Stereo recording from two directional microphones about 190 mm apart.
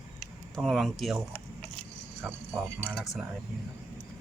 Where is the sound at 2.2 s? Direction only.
5° right (ahead or behind).